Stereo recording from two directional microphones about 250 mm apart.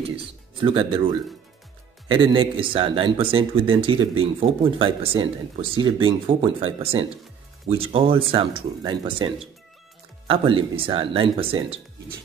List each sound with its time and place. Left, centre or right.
0.0 s speech: right